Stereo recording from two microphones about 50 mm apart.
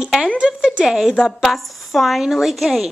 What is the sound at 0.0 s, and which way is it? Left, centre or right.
Speech, centre.